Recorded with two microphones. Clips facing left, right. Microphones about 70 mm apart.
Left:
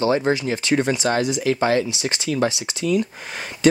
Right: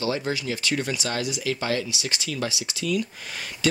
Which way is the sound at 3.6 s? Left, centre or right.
Left.